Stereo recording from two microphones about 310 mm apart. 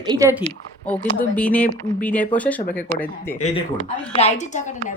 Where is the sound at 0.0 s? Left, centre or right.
Centre.